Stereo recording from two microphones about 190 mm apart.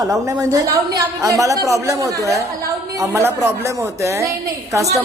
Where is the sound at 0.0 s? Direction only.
20° right (ahead or behind).